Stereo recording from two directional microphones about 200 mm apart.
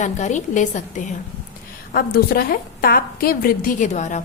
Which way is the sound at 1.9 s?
50° left (ahead or behind).